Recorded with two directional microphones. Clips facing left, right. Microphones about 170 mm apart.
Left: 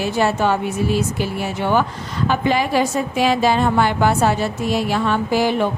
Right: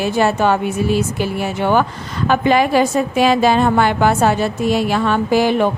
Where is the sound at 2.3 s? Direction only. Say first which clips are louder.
Right 5 dB; 55° right (ahead or behind).